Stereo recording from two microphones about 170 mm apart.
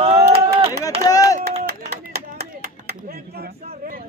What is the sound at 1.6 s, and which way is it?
Clapping, 70° right (ahead or behind).